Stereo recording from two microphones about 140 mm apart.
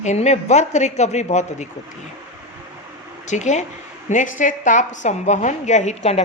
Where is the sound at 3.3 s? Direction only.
60° left (ahead or behind).